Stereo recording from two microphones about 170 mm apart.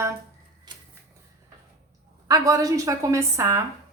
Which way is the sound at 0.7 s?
25° right (ahead or behind).